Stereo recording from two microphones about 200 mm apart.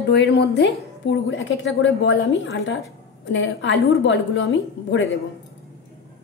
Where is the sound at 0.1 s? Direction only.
55° left (ahead or behind).